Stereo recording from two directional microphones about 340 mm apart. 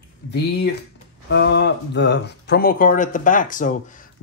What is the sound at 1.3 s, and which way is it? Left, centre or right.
Speech, left.